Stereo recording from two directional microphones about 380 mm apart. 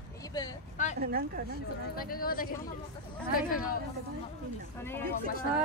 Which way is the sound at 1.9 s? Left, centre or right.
Left.